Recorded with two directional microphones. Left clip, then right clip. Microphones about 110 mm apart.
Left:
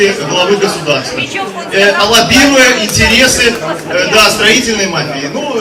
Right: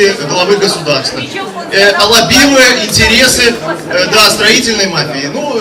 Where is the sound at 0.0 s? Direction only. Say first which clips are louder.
Even; 15° right (ahead or behind).